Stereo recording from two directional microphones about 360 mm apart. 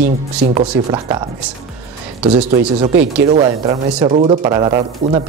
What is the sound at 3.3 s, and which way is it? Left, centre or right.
Speech, centre.